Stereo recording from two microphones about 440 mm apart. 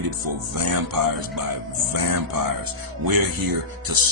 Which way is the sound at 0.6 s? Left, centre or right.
Right.